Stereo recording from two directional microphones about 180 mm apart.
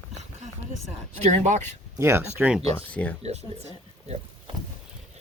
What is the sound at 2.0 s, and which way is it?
Speech, 15° right (ahead or behind).